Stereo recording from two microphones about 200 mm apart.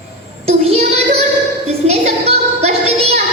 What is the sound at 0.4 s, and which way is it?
Child singing, 30° right (ahead or behind).